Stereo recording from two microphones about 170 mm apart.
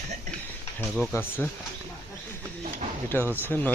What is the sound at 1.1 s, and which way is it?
Speech, 10° left (ahead or behind).